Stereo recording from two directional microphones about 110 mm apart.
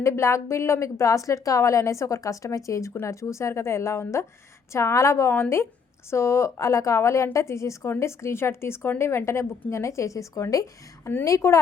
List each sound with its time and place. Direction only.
0.0 s a woman's voice: 25° left (ahead or behind)